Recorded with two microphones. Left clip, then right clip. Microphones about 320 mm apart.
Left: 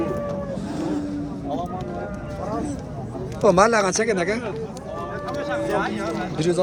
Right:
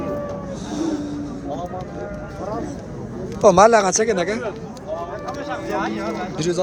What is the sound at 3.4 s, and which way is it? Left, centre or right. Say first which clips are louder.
Speech: right 4 dB; centre.